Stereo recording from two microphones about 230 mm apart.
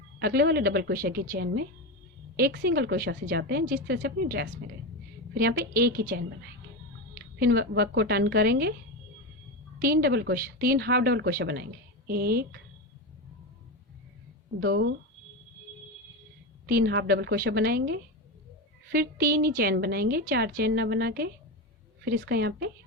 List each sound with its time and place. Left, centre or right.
0.2 s a woman's voice: right
9.8 s a woman's voice: right
14.6 s a woman's voice: right
16.6 s a woman's voice: right